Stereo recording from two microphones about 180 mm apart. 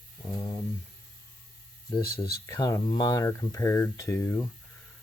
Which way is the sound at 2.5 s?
20° left (ahead or behind).